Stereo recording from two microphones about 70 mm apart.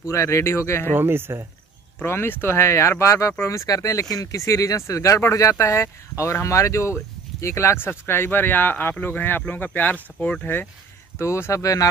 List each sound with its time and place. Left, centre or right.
0.0 s speech: left
0.9 s speech: right
2.0 s speech: left
11.1 s speech: left